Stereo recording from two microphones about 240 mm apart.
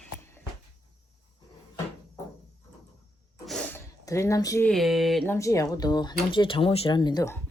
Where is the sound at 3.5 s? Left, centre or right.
Centre.